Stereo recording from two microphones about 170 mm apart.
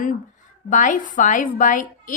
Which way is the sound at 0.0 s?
50° left (ahead or behind).